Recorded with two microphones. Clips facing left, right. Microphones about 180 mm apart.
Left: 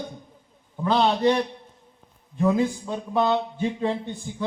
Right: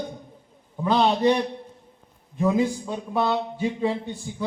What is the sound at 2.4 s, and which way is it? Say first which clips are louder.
Speech: even; 15° right (ahead or behind).